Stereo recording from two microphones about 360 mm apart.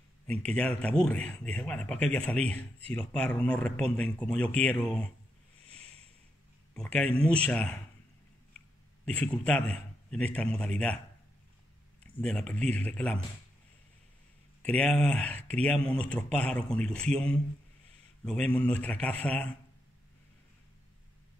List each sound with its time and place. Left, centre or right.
0.6 s speech: centre
5.7 s a sound: centre
6.7 s speech: centre
9.0 s speech: centre
12.2 s speech: centre
14.6 s speech: centre